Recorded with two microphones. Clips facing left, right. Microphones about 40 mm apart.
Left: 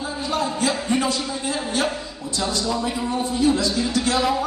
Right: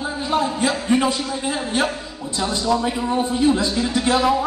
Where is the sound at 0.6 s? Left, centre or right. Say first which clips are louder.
Right 3 dB; centre.